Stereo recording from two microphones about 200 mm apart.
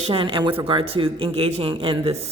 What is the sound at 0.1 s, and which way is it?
Speech, 25° right (ahead or behind).